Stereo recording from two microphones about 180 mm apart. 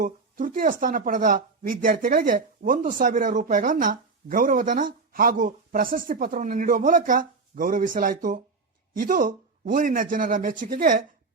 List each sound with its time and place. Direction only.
0.0 s speech: 50° right (ahead or behind)